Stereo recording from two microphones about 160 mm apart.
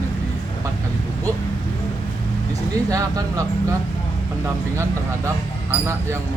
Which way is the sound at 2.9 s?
20° right (ahead or behind).